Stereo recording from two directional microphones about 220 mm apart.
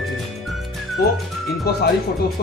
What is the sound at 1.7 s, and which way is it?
Speech, 45° left (ahead or behind).